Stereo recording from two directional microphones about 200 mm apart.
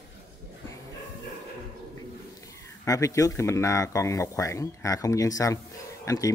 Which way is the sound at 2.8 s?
15° left (ahead or behind).